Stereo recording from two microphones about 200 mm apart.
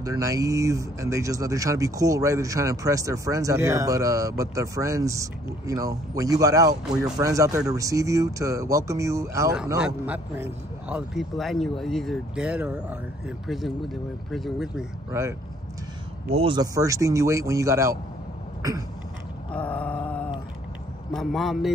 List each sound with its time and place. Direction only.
0.0 s a man's voice: 15° right (ahead or behind); by 14.9 s centre (ahead or behind)
16.3 s speech: 25° right (ahead or behind)
18.6 s a sound: 15° right (ahead or behind)
19.5 s groan: 5° left (ahead or behind)
21.1 s a man's voice: centre (ahead or behind)